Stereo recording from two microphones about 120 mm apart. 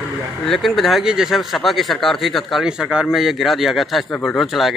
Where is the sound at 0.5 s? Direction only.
Centre (ahead or behind).